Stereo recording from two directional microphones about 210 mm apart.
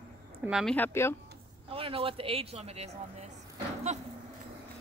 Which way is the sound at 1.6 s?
25° right (ahead or behind).